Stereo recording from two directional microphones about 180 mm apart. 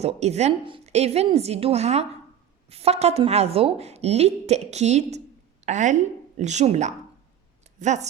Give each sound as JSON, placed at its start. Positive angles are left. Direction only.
{"t": 0.0, "sound": "a woman's voice", "side_deg": -35}